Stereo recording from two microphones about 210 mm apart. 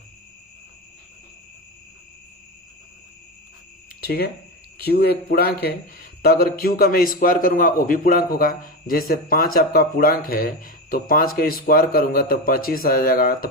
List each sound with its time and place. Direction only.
4.0 s speech: 45° left (ahead or behind)